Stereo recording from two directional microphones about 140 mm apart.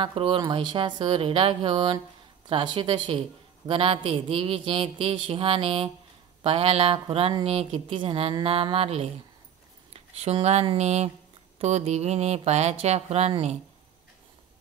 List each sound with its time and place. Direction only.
0.0 s speech: 40° right (ahead or behind)